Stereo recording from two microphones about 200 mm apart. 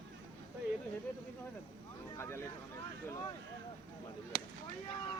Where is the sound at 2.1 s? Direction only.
15° left (ahead or behind).